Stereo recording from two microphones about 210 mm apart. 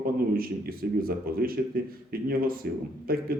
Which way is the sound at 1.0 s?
45° right (ahead or behind).